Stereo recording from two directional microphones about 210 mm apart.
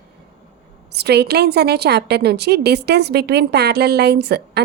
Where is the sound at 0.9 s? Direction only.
50° right (ahead or behind).